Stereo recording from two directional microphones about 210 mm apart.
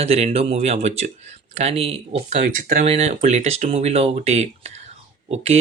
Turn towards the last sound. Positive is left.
turn(degrees=-30)  # may be behind; listen again after turning